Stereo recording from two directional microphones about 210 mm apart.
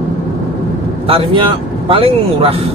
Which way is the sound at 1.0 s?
25° right (ahead or behind).